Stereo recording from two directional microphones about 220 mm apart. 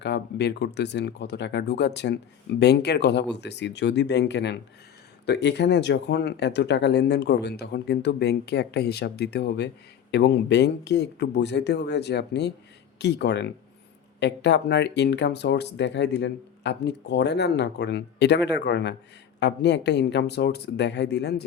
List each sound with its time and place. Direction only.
0.0 s speech: 50° left (ahead or behind)